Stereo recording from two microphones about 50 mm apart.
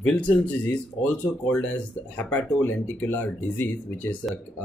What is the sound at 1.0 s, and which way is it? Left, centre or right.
Speech, left.